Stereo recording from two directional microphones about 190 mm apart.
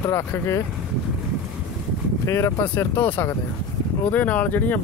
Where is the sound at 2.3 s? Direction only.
15° left (ahead or behind).